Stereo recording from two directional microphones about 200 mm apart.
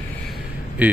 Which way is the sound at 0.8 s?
5° right (ahead or behind).